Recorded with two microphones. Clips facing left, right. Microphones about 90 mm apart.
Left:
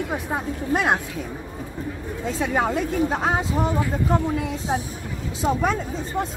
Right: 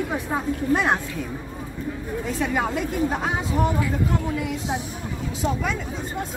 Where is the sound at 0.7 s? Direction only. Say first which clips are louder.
Even; 15° left (ahead or behind).